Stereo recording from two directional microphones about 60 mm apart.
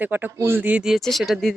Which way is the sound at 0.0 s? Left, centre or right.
Right.